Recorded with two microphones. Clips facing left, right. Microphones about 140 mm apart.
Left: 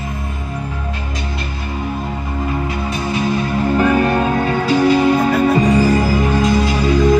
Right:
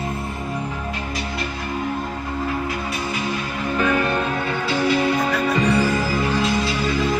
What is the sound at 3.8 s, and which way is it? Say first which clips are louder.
Music: left 5 dB; 40° left (ahead or behind).